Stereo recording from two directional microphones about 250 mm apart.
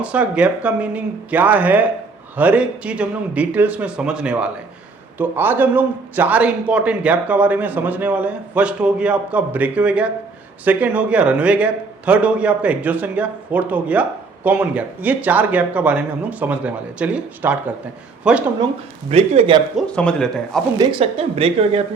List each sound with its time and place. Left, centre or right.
0.0 s a man's voice: centre
19.1 s a woman's voice: right
19.7 s a man's voice: centre
20.7 s a woman's voice: right